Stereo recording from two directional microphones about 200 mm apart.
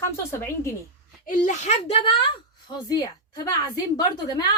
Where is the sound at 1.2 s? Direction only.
40° left (ahead or behind).